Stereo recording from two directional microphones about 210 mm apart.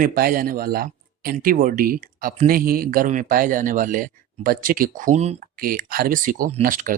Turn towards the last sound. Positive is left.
turn(degrees=-40)  # may be behind; listen again after turning